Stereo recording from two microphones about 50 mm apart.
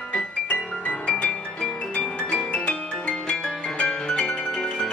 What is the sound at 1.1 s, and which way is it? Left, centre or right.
Music, left.